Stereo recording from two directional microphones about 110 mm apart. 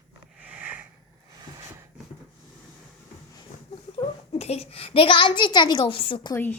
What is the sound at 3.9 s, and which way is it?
A child's voice, 70° left (ahead or behind).